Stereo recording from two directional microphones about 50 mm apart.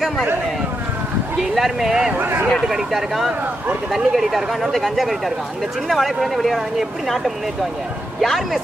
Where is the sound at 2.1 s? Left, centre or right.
Right.